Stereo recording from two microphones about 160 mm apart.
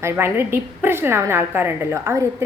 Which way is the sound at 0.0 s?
15° right (ahead or behind).